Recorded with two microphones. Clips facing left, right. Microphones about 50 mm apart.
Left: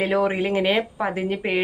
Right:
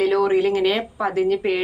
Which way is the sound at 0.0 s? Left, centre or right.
Left.